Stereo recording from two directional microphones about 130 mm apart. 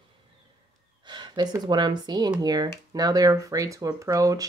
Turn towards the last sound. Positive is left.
turn(degrees=-25)  # may be behind; listen again after turning